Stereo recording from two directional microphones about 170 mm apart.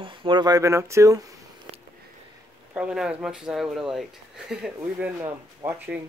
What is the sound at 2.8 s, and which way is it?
Speech, 5° right (ahead or behind).